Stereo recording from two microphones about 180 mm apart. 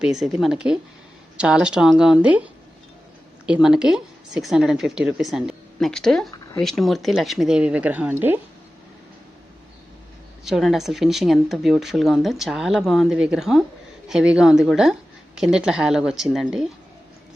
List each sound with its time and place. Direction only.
0.0 s speech: centre (ahead or behind)
10.4 s speech: centre (ahead or behind)